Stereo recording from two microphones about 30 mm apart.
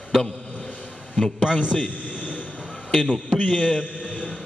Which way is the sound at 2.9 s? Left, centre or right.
Left.